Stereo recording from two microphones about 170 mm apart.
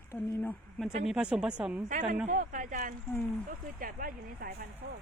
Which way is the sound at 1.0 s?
5° right (ahead or behind).